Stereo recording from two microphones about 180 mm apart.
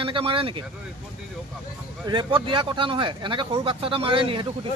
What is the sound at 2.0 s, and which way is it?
Speech, 25° right (ahead or behind).